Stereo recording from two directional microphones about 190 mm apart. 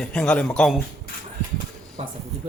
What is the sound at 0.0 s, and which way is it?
Speech, 5° left (ahead or behind).